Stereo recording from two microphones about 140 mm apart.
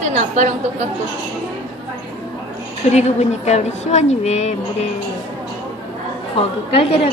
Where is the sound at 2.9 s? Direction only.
50° left (ahead or behind).